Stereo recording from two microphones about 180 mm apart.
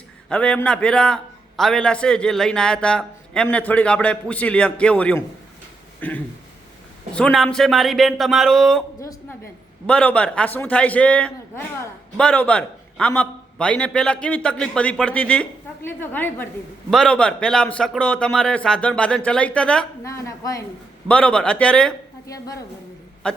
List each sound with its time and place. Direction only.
0.3 s a man's voice: 5° left (ahead or behind)
9.8 s a man's voice: 5° left (ahead or behind)
20.1 s a man's voice: 15° left (ahead or behind)
21.1 s a man's voice: 5° left (ahead or behind)
22.3 s a woman's voice: 20° left (ahead or behind)
23.2 s a man's voice: 5° left (ahead or behind)